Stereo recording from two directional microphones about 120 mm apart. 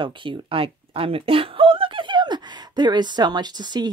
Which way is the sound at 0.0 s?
45° right (ahead or behind).